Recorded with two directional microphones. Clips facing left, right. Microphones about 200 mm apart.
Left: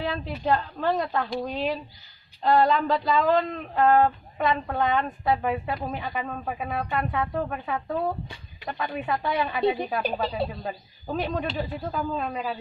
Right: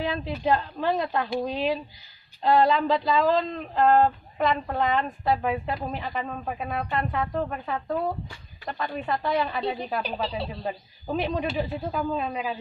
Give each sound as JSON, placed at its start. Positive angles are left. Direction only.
{"t": 0.0, "sound": "a woman's voice", "side_deg": -5}
{"t": 10.2, "sound": "speech", "side_deg": 50}
{"t": 10.6, "sound": "a woman's voice", "side_deg": -5}